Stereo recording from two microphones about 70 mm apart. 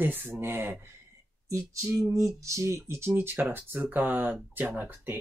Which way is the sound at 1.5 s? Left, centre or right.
Right.